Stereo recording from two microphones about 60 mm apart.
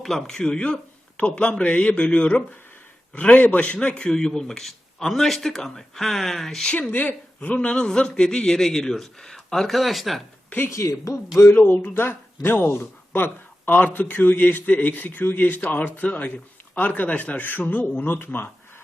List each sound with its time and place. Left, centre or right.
0.0 s a man's voice: centre
6.9 s a man's voice: left; by 10.2 s centre
10.7 s speech: left
11.3 s a man's voice: left